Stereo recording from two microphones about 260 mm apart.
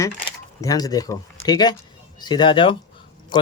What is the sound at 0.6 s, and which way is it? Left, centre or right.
Speech, centre.